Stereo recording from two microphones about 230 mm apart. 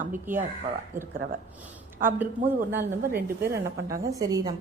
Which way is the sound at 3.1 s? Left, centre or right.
Right.